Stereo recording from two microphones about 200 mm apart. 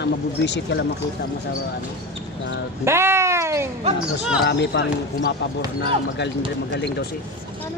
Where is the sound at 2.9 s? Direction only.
15° right (ahead or behind).